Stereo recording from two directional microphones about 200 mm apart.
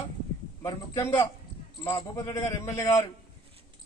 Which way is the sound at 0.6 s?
15° left (ahead or behind).